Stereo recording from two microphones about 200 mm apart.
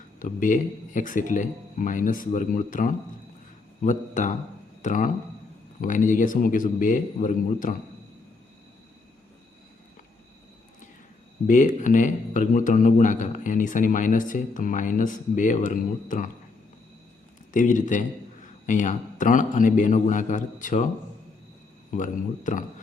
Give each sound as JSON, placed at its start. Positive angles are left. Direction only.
{"t": 0.2, "sound": "speech", "side_deg": 40}
{"t": 11.4, "sound": "speech", "side_deg": 40}
{"t": 17.5, "sound": "speech", "side_deg": 40}
{"t": 21.9, "sound": "speech", "side_deg": 40}